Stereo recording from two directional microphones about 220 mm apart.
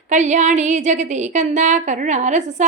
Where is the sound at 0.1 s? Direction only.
35° right (ahead or behind).